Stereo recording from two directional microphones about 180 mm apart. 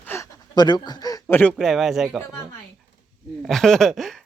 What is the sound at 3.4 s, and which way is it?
Speech, centre (ahead or behind).